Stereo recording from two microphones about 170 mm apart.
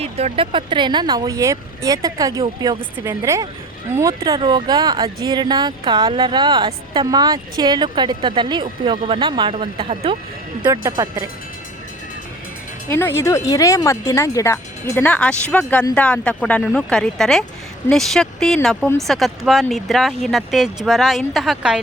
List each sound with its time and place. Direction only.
0.0 s speech: 35° right (ahead or behind)
10.6 s speech: 20° right (ahead or behind)
12.9 s speech: 15° left (ahead or behind); by 21.8 s 5° right (ahead or behind)